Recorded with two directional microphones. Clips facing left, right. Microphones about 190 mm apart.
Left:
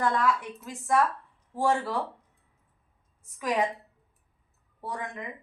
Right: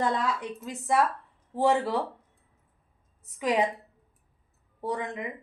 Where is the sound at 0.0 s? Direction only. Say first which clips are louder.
Left 1 dB; 20° right (ahead or behind).